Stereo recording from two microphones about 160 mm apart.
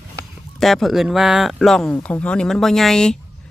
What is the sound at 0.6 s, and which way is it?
Speech, centre (ahead or behind).